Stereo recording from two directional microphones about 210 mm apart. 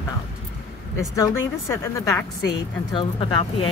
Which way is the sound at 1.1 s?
15° left (ahead or behind).